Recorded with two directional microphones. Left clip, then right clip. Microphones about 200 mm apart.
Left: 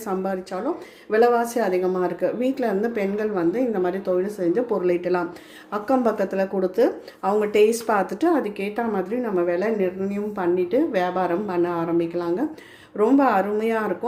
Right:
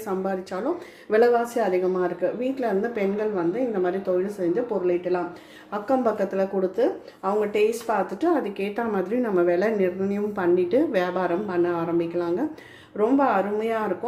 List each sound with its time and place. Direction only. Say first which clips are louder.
1.1 s a woman's voice: left 1 dB; 10° left (ahead or behind)